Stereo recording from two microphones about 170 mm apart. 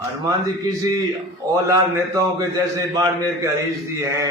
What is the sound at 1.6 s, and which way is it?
A man's voice, 20° right (ahead or behind).